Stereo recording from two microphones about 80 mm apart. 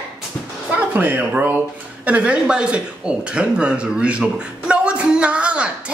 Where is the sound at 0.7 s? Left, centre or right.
Right.